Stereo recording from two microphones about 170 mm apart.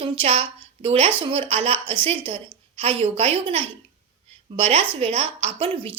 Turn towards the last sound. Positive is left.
turn(degrees=-35)  # may be behind; listen again after turning